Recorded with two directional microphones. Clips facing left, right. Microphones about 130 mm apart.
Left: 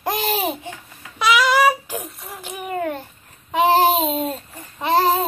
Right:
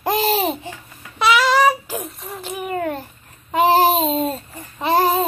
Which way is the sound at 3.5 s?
5° right (ahead or behind).